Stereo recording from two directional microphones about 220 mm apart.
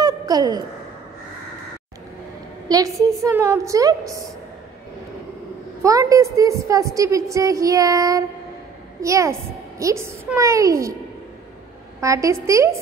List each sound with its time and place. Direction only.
0.0 s a sound: 15° right (ahead or behind)
2.7 s a woman's voice: 15° right (ahead or behind)
5.8 s a woman's voice: 15° right (ahead or behind)
12.0 s a woman's voice: 15° right (ahead or behind)